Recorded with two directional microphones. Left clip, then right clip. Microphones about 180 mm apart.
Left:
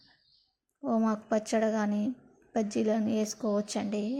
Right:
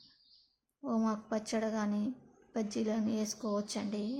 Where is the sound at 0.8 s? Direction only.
25° left (ahead or behind).